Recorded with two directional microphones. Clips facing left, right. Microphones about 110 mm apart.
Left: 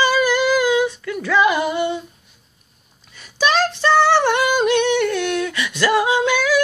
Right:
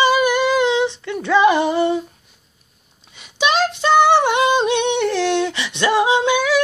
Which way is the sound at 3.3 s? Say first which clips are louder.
Even; 15° right (ahead or behind).